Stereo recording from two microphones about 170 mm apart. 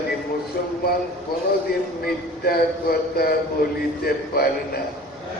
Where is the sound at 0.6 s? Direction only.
60° left (ahead or behind).